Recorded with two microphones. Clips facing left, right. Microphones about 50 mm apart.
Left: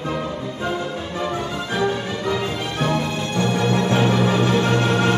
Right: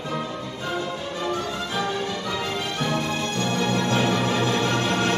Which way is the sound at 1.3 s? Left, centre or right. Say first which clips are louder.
Even; centre.